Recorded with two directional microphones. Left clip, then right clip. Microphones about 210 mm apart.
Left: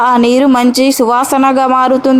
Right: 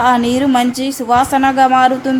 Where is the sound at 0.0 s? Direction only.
30° left (ahead or behind).